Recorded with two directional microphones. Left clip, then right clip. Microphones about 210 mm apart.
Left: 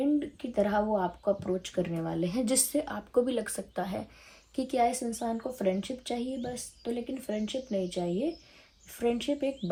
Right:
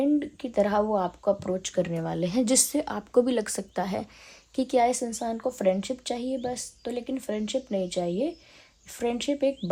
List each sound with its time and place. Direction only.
0.0 s speech: 35° right (ahead or behind)